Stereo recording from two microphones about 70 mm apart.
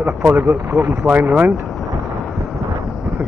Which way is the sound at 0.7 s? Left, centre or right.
Right.